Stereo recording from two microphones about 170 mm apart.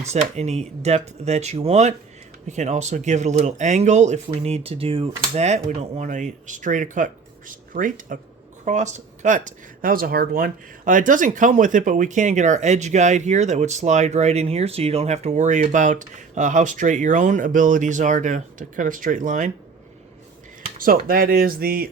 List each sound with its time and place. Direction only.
0.0 s speech: 40° right (ahead or behind)
20.7 s speech: 55° right (ahead or behind)